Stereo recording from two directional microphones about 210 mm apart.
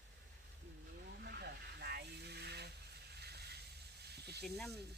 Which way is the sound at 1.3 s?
50° right (ahead or behind).